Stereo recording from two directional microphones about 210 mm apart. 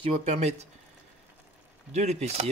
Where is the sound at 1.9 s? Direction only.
30° right (ahead or behind).